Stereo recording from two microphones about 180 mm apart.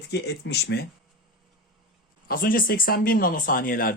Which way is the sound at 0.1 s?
65° left (ahead or behind).